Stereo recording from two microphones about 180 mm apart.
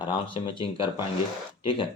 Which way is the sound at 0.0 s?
25° left (ahead or behind).